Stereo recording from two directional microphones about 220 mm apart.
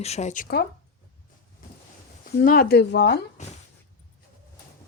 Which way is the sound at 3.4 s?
30° left (ahead or behind).